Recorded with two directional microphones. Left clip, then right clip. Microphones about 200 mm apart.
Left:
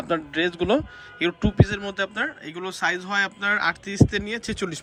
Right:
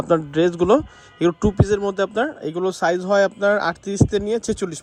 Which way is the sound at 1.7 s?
35° right (ahead or behind).